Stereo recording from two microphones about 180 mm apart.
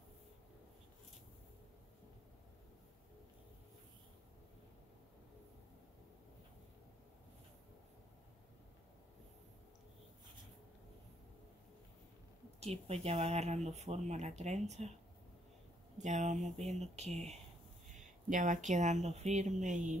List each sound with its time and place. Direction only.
12.5 s speech: 35° right (ahead or behind)
16.0 s speech: 40° right (ahead or behind)